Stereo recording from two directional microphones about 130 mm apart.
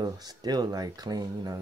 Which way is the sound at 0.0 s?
30° right (ahead or behind).